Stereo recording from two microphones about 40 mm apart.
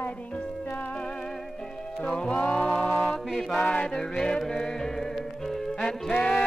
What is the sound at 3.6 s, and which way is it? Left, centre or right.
Music, left.